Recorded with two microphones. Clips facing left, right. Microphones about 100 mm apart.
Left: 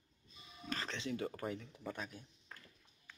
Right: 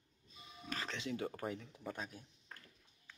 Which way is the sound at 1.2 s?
10° right (ahead or behind).